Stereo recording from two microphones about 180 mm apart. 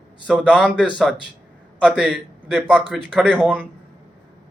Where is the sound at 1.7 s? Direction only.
5° right (ahead or behind).